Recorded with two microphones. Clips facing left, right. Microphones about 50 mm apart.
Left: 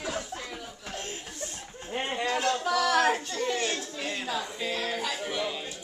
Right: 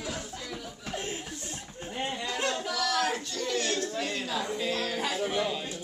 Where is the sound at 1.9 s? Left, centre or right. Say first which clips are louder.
Left 4 dB; left; by 4.4 s centre.